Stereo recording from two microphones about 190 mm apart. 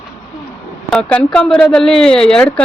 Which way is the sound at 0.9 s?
5° left (ahead or behind).